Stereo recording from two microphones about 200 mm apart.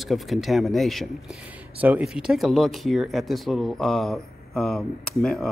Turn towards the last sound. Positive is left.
turn(degrees=5)  # may be behind; listen again after turning